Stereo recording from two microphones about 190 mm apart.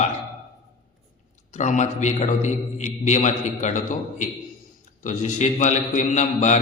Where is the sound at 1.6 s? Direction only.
40° left (ahead or behind).